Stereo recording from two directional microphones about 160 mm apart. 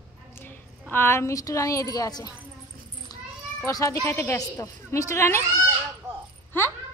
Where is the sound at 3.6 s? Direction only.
20° left (ahead or behind).